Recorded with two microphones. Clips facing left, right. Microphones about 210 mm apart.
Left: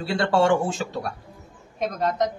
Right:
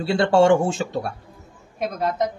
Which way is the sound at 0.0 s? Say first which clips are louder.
Right 4 dB; 25° right (ahead or behind).